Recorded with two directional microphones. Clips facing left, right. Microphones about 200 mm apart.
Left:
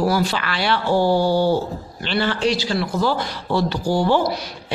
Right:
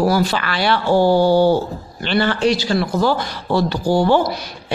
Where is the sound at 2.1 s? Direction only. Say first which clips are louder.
Right 4 dB; 55° right (ahead or behind).